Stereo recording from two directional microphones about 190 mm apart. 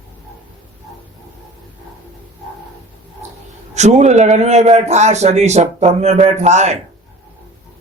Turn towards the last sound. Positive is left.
turn(degrees=-35)  # may be behind; listen again after turning